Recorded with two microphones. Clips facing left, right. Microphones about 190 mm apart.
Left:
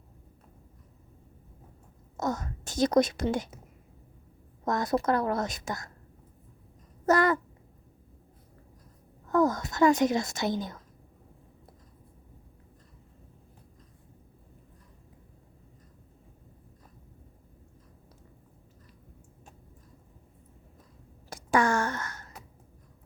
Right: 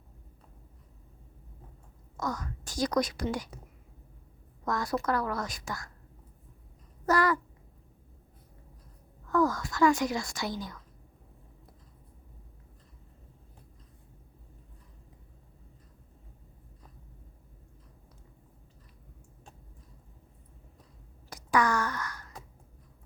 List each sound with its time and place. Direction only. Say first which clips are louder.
2.1 s a woman's voice: left 4 dB; 25° left (ahead or behind)
4.6 s a woman's voice: left 4 dB; 20° left (ahead or behind)
7.0 s babbling: left 3 dB; 25° left (ahead or behind)
9.2 s speech: left 2 dB; 20° left (ahead or behind)
21.2 s a sound: left 2 dB; 25° left (ahead or behind)